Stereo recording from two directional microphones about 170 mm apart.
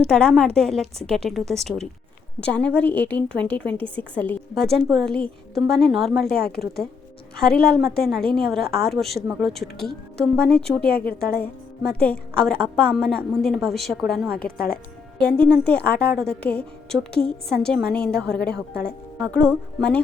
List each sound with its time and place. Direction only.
0.1 s a woman's voice: 5° left (ahead or behind)
7.3 s a woman's voice: 5° left (ahead or behind)
10.8 s a woman's voice: 65° left (ahead or behind)
11.9 s a woman's voice: 5° left (ahead or behind)
14.4 s speech: 65° left (ahead or behind)
15.2 s a woman's voice: 5° left (ahead or behind)